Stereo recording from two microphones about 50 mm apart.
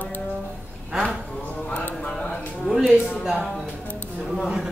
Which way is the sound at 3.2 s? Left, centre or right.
Centre.